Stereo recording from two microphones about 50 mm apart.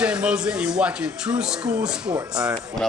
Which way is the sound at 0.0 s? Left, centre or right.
Centre.